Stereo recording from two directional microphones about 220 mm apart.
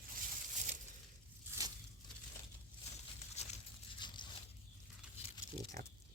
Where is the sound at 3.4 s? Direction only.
30° left (ahead or behind).